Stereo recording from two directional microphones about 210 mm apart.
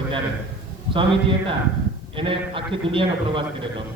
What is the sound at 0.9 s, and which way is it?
A man's voice, 25° right (ahead or behind).